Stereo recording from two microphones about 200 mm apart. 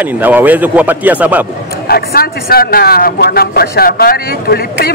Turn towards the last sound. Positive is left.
turn(degrees=50)  # may be behind; listen again after turning